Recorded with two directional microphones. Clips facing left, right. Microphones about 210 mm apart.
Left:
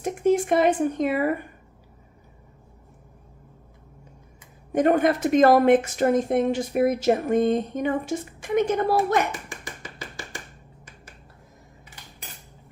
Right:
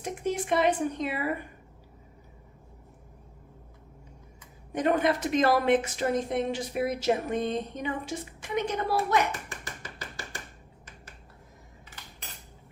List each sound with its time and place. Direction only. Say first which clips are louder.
0.0 s a woman's voice: left 9 dB; 50° left (ahead or behind)
4.7 s a woman's voice: left 6 dB; 50° left (ahead or behind)